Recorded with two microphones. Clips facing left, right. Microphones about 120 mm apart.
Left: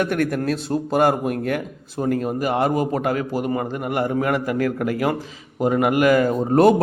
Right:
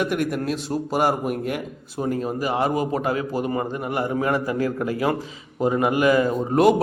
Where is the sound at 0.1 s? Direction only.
50° left (ahead or behind).